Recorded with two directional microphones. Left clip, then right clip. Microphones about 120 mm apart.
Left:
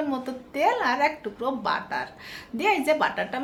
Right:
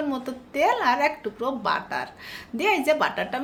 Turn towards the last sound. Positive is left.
turn(degrees=-25)  # may be behind; listen again after turning